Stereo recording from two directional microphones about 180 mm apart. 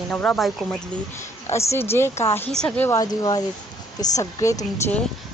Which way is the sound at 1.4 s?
15° left (ahead or behind).